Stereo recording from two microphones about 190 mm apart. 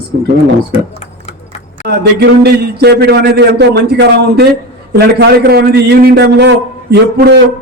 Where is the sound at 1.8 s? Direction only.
55° right (ahead or behind).